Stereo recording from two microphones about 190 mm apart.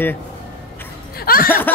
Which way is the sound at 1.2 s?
50° left (ahead or behind).